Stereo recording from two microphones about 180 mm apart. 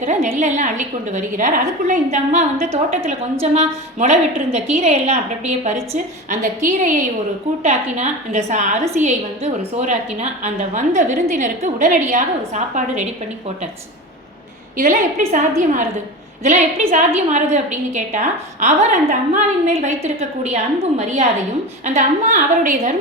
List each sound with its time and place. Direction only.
0.0 s a woman's voice: 40° right (ahead or behind)
14.8 s a woman's voice: 45° right (ahead or behind)
21.9 s a woman's voice: 45° right (ahead or behind)